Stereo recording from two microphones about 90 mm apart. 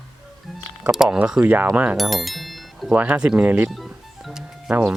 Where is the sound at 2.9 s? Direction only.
20° right (ahead or behind).